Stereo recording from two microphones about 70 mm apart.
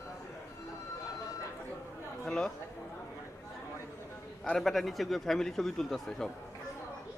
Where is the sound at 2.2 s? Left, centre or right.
Centre.